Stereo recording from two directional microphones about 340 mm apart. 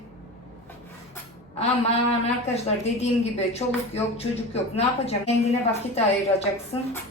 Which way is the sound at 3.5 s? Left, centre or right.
Centre.